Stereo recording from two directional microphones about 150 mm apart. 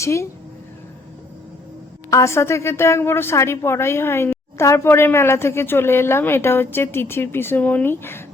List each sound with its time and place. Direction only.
0.0 s speech: 20° left (ahead or behind)
2.0 s a woman's voice: 20° left (ahead or behind)